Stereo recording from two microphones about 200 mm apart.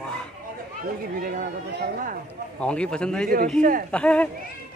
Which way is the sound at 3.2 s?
45° right (ahead or behind).